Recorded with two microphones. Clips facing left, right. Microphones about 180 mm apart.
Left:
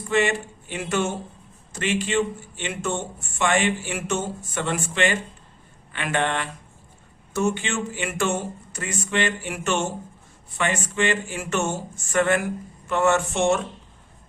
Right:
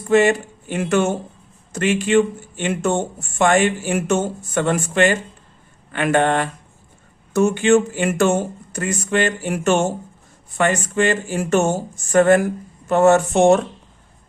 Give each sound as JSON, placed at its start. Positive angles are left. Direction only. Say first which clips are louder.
{"t": 0.0, "sound": "speech", "louder": "right 7 dB", "side_deg": -45}